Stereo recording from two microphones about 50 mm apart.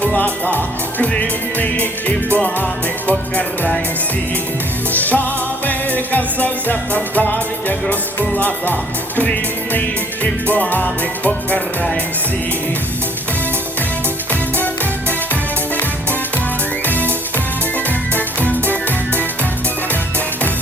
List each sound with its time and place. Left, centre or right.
0.0 s music: left
4.9 s music: left
10.5 s music: left
16.8 s music: left
18.4 s music: left